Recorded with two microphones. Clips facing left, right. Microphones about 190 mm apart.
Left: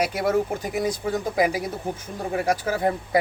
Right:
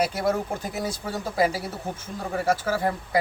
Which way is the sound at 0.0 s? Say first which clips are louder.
Left 2 dB; 10° left (ahead or behind).